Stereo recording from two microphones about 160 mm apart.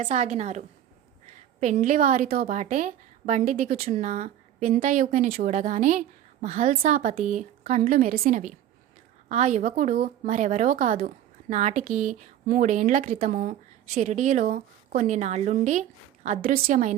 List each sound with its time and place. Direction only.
0.0 s a woman's voice: 45° right (ahead or behind)
1.7 s a woman's voice: 55° right (ahead or behind)
2.6 s a woman's voice: 55° right (ahead or behind)